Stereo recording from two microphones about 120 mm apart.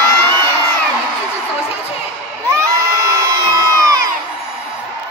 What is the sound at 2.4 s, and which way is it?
Crowd, 25° right (ahead or behind).